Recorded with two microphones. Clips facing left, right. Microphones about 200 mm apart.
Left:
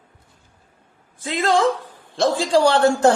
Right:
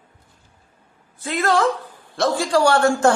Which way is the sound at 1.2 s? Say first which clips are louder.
Left 1 dB; 15° left (ahead or behind).